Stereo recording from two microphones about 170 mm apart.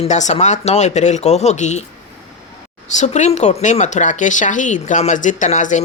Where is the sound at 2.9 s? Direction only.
45° left (ahead or behind).